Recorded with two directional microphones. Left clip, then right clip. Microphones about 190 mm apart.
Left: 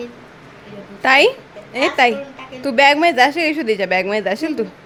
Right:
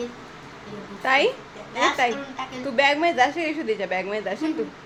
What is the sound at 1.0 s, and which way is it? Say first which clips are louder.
A woman's voice: left 8 dB; 70° left (ahead or behind).